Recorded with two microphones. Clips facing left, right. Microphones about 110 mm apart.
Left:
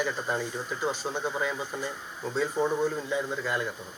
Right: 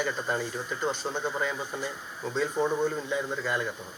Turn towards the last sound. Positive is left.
turn(degrees=0)  # may be behind; listen again after turning